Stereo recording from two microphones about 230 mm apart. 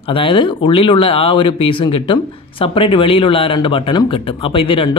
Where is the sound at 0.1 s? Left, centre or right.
Left.